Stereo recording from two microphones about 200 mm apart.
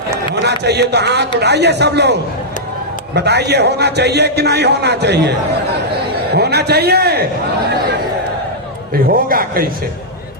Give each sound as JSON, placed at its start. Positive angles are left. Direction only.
{"t": 0.3, "sound": "a man's voice", "side_deg": -55}
{"t": 3.2, "sound": "a man's voice", "side_deg": -55}
{"t": 6.3, "sound": "a man's voice", "side_deg": -55}
{"t": 9.0, "sound": "a man's voice", "side_deg": -45}